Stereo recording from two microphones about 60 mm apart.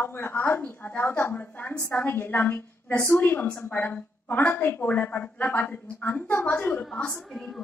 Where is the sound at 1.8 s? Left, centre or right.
Left.